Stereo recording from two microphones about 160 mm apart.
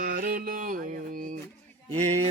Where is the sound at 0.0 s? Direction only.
65° right (ahead or behind).